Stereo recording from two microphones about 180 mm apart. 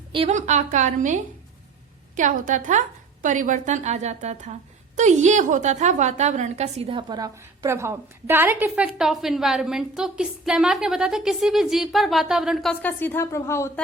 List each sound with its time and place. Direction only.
0.1 s a woman's voice: 35° right (ahead or behind); by 12.7 s centre (ahead or behind)
12.8 s a woman's voice: 10° left (ahead or behind)